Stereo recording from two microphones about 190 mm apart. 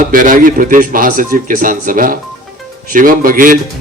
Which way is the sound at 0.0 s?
45° right (ahead or behind).